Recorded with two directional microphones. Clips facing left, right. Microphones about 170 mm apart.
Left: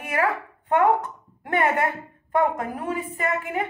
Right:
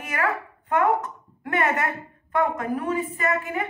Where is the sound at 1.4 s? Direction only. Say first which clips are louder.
Left 2 dB; 20° left (ahead or behind).